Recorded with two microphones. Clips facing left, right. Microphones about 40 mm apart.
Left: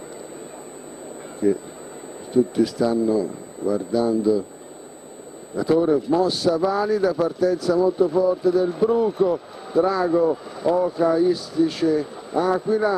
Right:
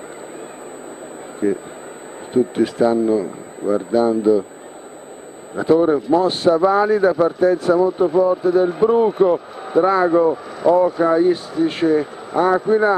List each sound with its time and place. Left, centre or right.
1.4 s speech: right
5.6 s speech: right